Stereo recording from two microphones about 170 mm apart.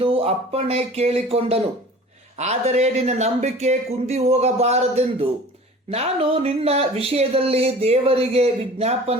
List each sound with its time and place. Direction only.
0.0 s speech: 35° right (ahead or behind)